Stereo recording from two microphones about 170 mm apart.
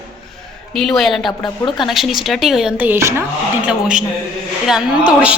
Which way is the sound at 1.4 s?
25° left (ahead or behind).